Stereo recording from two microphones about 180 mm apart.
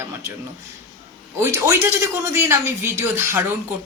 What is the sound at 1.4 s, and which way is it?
A man's voice, 15° right (ahead or behind).